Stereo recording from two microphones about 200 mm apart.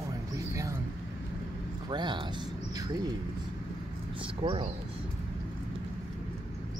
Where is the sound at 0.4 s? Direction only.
15° right (ahead or behind).